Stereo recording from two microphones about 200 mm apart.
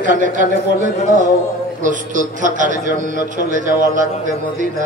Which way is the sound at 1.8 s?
40° right (ahead or behind).